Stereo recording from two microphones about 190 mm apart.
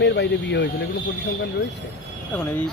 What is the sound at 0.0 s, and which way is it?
Speech, 65° left (ahead or behind).